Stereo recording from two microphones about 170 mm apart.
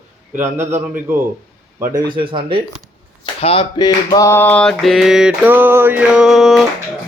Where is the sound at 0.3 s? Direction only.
15° right (ahead or behind).